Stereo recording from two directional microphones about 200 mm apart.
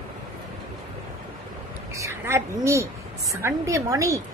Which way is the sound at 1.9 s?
15° right (ahead or behind).